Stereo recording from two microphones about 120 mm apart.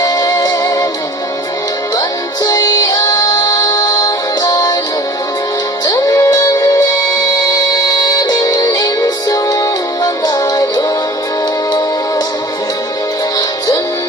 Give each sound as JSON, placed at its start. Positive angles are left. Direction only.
{"t": 0.0, "sound": "music", "side_deg": 30}
{"t": 2.0, "sound": "music", "side_deg": 30}
{"t": 5.8, "sound": "music", "side_deg": 30}
{"t": 7.9, "sound": "music", "side_deg": 30}